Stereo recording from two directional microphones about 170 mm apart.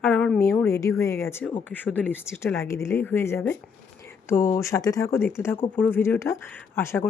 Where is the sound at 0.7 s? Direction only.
15° left (ahead or behind).